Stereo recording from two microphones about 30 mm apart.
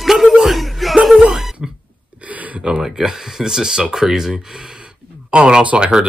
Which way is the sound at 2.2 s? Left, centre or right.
Right.